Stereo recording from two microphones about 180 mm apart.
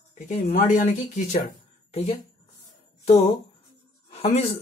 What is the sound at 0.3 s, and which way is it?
Speech, 40° left (ahead or behind).